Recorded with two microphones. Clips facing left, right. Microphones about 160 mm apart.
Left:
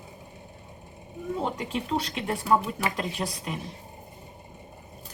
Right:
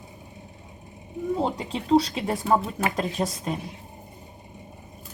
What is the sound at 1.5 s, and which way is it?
A woman's voice, 35° right (ahead or behind).